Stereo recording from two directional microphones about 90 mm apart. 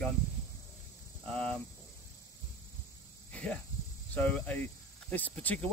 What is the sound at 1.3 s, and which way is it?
Speech, 10° left (ahead or behind).